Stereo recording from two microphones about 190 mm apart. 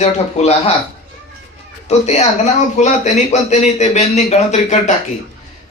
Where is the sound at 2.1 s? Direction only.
35° left (ahead or behind).